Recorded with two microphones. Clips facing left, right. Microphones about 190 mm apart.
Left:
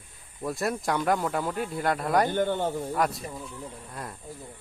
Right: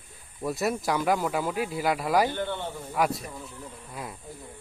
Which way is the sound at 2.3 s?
45° left (ahead or behind).